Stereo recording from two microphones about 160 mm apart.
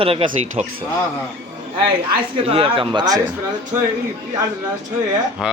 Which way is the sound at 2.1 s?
35° right (ahead or behind).